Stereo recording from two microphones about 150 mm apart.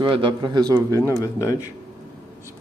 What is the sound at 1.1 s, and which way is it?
Speech, 20° left (ahead or behind).